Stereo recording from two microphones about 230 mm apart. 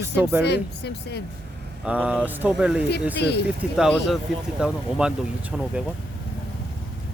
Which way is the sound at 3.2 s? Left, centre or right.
Left.